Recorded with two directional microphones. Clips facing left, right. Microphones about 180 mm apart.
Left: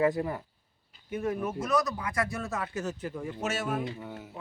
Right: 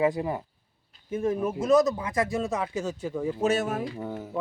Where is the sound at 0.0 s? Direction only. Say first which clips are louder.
Right 2 dB; 15° right (ahead or behind).